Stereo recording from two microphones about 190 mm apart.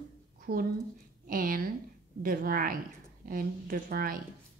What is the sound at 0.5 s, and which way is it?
A woman's voice, 50° right (ahead or behind).